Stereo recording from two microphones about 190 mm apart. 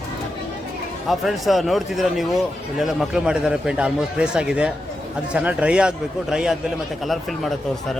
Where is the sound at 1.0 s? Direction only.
Centre (ahead or behind).